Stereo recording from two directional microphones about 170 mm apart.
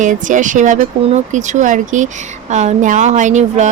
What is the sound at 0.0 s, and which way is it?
A woman's voice, 50° right (ahead or behind).